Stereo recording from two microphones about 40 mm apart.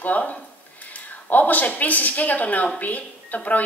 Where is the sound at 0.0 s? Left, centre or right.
Left.